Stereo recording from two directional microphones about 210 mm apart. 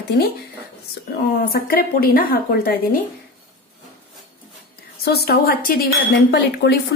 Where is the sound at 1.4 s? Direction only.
45° left (ahead or behind).